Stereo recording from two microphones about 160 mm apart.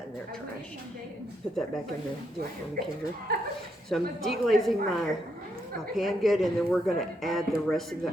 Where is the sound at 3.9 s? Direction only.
Centre (ahead or behind).